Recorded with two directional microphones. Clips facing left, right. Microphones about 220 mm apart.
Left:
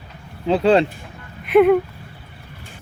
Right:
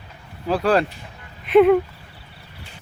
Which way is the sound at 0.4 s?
25° left (ahead or behind).